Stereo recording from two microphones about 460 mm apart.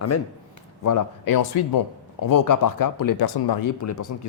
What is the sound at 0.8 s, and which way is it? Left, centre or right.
A man's voice, left.